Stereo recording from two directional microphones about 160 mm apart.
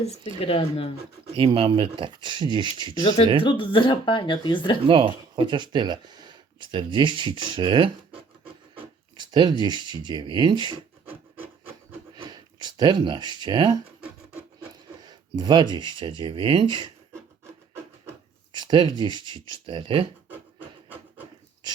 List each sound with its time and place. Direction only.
0.4 s speech: 40° left (ahead or behind)
1.4 s speech: 35° right (ahead or behind)
3.4 s speech: 30° left (ahead or behind)
4.9 s speech: 30° right (ahead or behind)
12.1 s a sound: 25° right (ahead or behind)
15.0 s speech: 25° right (ahead or behind)
18.5 s speech: 30° right (ahead or behind)
20.3 s a sound: 10° right (ahead or behind)